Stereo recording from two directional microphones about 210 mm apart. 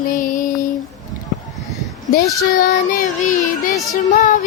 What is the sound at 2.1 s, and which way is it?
Child singing, 40° left (ahead or behind).